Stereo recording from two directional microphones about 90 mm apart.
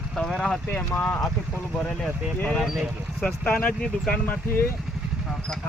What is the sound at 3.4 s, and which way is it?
Speech, 15° left (ahead or behind).